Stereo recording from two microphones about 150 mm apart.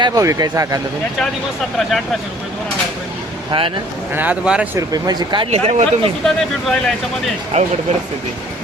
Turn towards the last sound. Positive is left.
turn(degrees=-50)  # may be behind; listen again after turning